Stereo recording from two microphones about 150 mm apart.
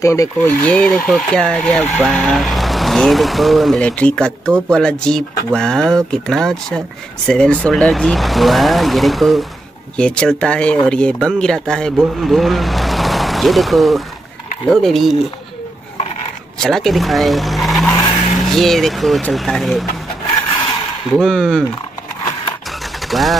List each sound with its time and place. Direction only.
0.0 s speech: 20° left (ahead or behind)
0.7 s speech: 5° left (ahead or behind)
16.5 s speech: 5° left (ahead or behind)
21.2 s speech: centre (ahead or behind)
23.0 s speech: centre (ahead or behind)